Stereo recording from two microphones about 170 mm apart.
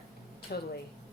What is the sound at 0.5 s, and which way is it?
Speech, 65° left (ahead or behind).